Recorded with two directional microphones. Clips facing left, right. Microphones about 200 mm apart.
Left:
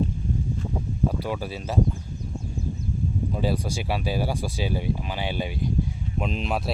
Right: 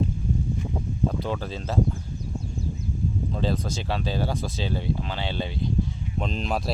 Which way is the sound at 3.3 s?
10° left (ahead or behind).